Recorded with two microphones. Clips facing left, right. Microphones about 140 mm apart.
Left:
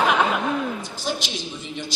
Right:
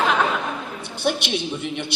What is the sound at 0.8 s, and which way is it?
A woman's voice, 65° right (ahead or behind).